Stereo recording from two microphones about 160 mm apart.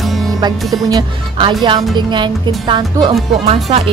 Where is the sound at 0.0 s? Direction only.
Centre (ahead or behind).